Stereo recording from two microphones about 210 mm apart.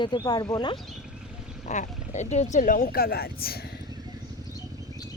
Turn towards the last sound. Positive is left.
turn(degrees=45)  # may be behind; listen again after turning